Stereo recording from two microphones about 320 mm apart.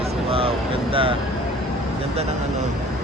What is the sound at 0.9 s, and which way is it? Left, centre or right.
Speech, centre.